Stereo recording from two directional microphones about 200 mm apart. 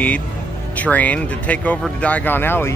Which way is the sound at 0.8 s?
5° left (ahead or behind).